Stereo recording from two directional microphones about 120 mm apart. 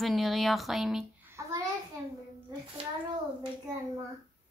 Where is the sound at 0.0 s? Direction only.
Centre (ahead or behind).